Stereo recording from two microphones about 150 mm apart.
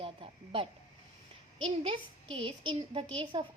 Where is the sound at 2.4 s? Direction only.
35° right (ahead or behind).